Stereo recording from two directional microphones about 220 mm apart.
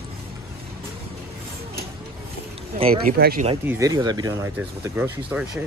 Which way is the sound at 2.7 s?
25° right (ahead or behind).